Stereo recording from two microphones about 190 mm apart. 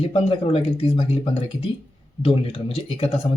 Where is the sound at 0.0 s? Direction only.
30° left (ahead or behind).